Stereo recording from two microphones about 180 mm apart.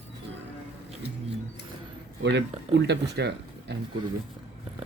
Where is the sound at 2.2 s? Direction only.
75° right (ahead or behind).